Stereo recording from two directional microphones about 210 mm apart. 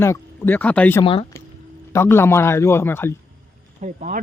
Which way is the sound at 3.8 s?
35° right (ahead or behind).